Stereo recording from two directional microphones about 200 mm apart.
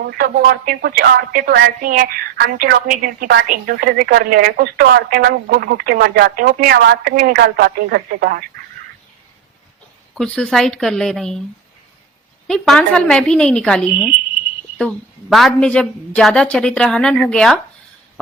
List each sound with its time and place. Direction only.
0.2 s speech: 50° right (ahead or behind)
10.2 s a woman's voice: 5° left (ahead or behind)
12.5 s a woman's voice: 5° left (ahead or behind)
13.9 s a woman's voice: 5° right (ahead or behind)